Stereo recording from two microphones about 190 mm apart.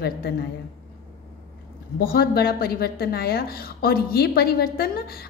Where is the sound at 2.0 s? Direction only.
55° left (ahead or behind).